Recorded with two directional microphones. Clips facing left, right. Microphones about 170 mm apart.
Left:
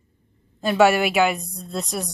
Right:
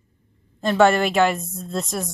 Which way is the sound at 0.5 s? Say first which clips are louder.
Even; 5° left (ahead or behind).